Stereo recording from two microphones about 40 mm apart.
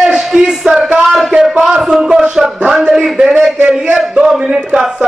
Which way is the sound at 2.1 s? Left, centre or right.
Right.